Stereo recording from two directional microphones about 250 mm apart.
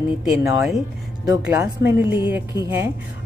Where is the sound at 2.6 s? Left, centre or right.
Centre.